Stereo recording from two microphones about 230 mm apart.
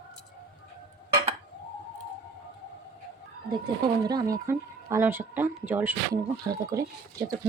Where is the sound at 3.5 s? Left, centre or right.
Centre.